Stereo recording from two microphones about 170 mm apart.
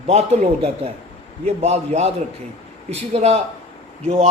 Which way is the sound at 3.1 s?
35° right (ahead or behind).